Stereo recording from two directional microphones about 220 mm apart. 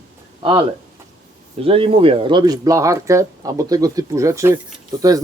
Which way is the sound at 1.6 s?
25° right (ahead or behind).